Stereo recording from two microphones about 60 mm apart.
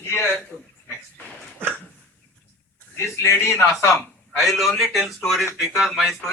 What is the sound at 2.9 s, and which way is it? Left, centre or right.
Speech, left.